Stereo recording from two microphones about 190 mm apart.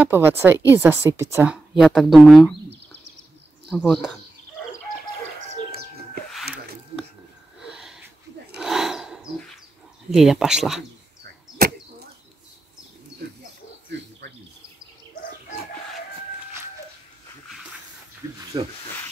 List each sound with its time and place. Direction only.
0.0 s a woman's voice: 10° right (ahead or behind)
3.7 s speech: 5° right (ahead or behind)
7.6 s sniff: 5° right (ahead or behind)
8.5 s a sound: centre (ahead or behind)
10.1 s speech: centre (ahead or behind)
14.2 s insect: 65° right (ahead or behind)
18.5 s speech: 25° right (ahead or behind)